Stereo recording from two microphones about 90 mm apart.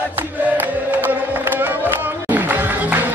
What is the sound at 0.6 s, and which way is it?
Music, 20° right (ahead or behind).